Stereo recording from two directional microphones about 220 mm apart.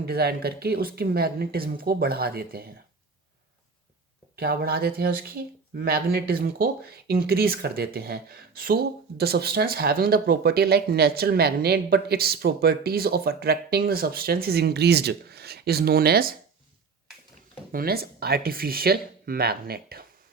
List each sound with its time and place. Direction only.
0.0 s speech: 45° right (ahead or behind)
4.4 s speech: 45° right (ahead or behind)
17.7 s speech: 45° right (ahead or behind)